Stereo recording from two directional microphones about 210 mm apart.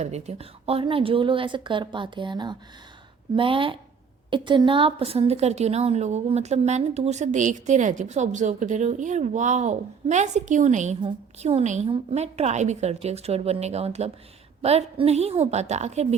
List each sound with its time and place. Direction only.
0.0 s a woman's voice: 30° right (ahead or behind)